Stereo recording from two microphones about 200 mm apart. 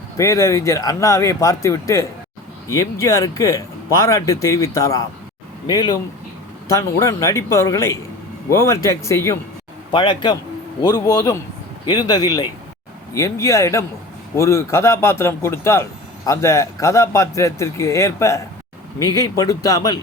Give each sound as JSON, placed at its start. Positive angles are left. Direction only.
{"t": 0.2, "sound": "a man's voice", "side_deg": 15}